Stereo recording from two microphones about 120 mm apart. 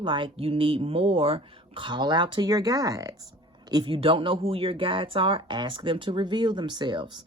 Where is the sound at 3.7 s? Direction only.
45° right (ahead or behind).